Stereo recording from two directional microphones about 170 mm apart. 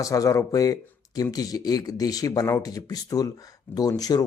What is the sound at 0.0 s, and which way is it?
Speech, 20° left (ahead or behind).